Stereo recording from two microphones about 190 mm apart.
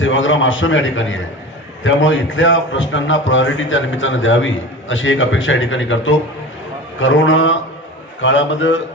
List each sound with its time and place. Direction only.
0.0 s a man's voice: 90° left